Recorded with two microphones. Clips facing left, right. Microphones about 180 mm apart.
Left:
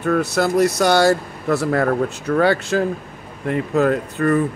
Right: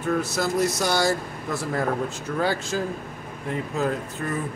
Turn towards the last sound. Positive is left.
turn(degrees=65)  # may be behind; listen again after turning